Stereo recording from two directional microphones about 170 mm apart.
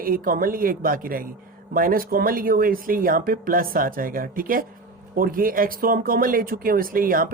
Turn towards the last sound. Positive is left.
turn(degrees=-55)  # may be behind; listen again after turning